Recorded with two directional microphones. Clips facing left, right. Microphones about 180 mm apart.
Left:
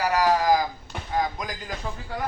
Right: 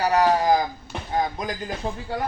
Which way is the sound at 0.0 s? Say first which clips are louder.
Right 2 dB; 30° right (ahead or behind).